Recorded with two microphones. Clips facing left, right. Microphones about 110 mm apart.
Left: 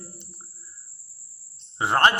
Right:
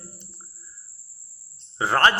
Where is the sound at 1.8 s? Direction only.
20° left (ahead or behind).